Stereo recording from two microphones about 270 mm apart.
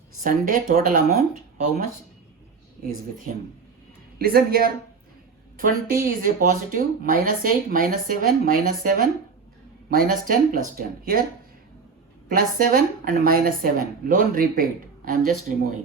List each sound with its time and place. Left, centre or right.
0.2 s speech: right
2.8 s speech: right
12.3 s speech: right